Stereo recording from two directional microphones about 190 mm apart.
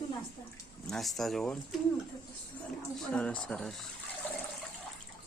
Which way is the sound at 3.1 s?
5° left (ahead or behind).